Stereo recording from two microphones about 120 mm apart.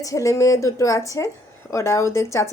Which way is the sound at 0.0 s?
25° left (ahead or behind).